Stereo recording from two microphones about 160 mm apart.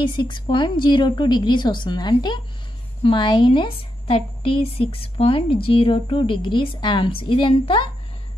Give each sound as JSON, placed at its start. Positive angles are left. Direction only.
{"t": 0.0, "sound": "a woman's voice", "side_deg": 30}